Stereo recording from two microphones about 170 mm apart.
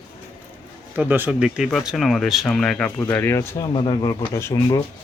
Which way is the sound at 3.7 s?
25° left (ahead or behind).